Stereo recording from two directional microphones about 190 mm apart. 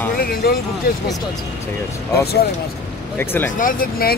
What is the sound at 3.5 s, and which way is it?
Speech, 50° left (ahead or behind).